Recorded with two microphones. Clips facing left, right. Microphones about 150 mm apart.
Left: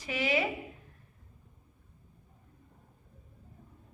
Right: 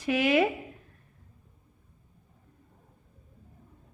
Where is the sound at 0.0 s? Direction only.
55° right (ahead or behind).